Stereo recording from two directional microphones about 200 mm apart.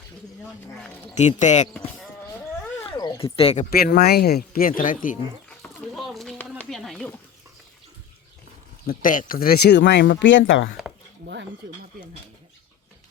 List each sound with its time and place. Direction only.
1.1 s speech: 35° left (ahead or behind)
2.8 s a sound: 25° left (ahead or behind)
3.8 s speech: 50° left (ahead or behind)
5.5 s a sound: centre (ahead or behind)
8.9 s speech: 45° left (ahead or behind); by 10.7 s 70° left (ahead or behind)
11.6 s speech: 60° right (ahead or behind)